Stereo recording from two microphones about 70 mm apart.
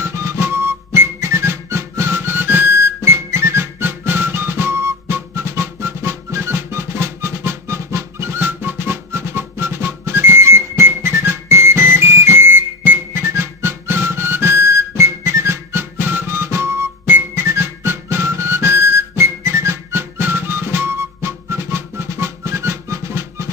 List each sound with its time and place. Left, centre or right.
0.0 s music: right